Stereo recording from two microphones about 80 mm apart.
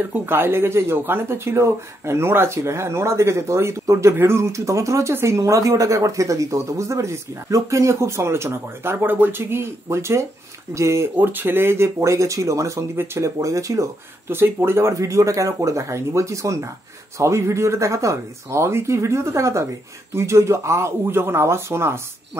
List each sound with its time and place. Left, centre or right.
0.1 s speech: right
11.1 s speech: right
14.3 s speech: right